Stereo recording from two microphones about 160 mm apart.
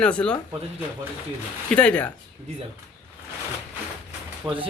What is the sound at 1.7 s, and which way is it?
Speech, 10° left (ahead or behind).